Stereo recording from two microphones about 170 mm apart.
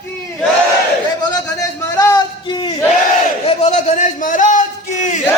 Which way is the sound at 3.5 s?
45° left (ahead or behind).